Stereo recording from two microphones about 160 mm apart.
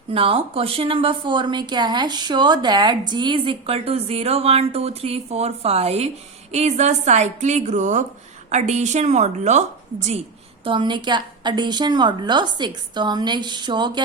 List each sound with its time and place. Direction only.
0.1 s a woman's voice: 35° right (ahead or behind)
10.6 s a woman's voice: 30° right (ahead or behind)